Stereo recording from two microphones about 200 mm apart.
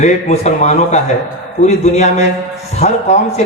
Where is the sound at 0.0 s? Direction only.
35° left (ahead or behind).